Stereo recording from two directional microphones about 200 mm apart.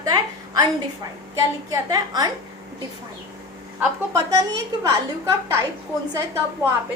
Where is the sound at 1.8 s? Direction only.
20° right (ahead or behind).